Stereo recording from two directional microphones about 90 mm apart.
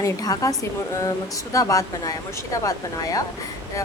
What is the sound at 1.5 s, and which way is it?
A woman's voice, 40° left (ahead or behind).